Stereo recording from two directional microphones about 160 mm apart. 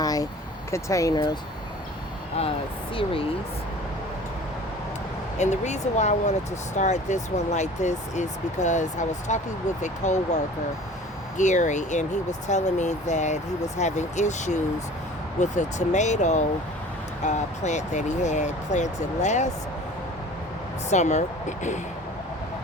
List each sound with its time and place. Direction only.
0.0 s vehicle: 25° left (ahead or behind)
0.7 s speech: 20° left (ahead or behind)
2.9 s speech: 35° left (ahead or behind)
5.4 s speech: 45° left (ahead or behind)
20.9 s speech: 45° left (ahead or behind)